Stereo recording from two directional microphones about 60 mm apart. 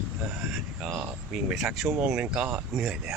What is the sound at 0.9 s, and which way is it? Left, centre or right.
Speech, right.